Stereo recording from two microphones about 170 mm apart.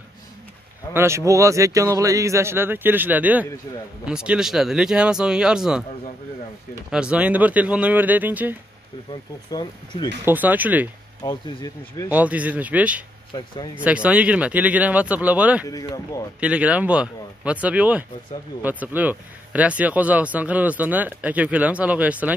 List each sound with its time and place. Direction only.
0.9 s speech: 15° right (ahead or behind)
6.9 s speech: 5° right (ahead or behind)
9.5 s speech: 25° left (ahead or behind)
10.2 s speech: 10° right (ahead or behind)
11.2 s speech: 20° left (ahead or behind)
12.1 s speech: 10° right (ahead or behind)
15.6 s speech: 20° left (ahead or behind)
16.3 s speech: 5° right (ahead or behind)